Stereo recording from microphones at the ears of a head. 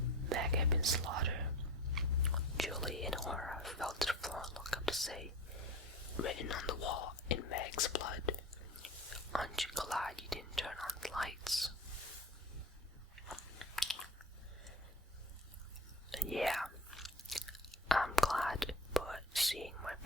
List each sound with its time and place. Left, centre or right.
0.3 s whispering: right
2.6 s whispering: centre
5.5 s whispering: left
9.3 s whispering: centre
16.0 s chewing: centre